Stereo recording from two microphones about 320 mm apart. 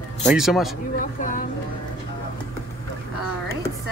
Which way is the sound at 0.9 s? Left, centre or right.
Left.